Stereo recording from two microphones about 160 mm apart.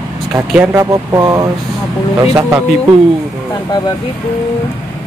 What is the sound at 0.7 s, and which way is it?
Speech, 20° right (ahead or behind).